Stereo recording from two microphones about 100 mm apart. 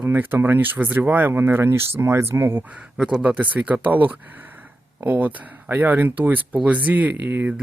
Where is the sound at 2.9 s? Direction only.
10° right (ahead or behind).